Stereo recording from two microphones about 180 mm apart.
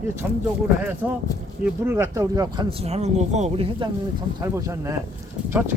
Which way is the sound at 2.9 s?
40° right (ahead or behind).